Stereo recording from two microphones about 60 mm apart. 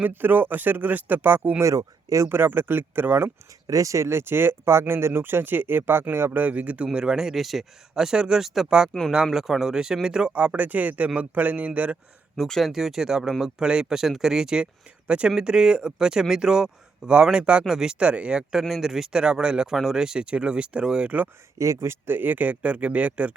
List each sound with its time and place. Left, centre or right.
0.1 s speech: right
1.6 s speech: right
2.2 s speech: right
3.7 s speech: right
6.4 s speech: right
6.8 s speech: centre
8.9 s speech: centre
9.2 s speech: centre; by 11.9 s right
12.4 s a man's voice: centre
21.6 s speech: right